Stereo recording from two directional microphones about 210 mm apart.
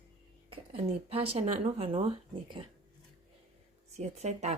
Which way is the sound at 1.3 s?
30° right (ahead or behind).